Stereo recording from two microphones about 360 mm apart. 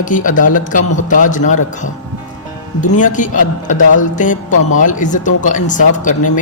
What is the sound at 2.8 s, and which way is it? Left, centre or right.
Speech, left.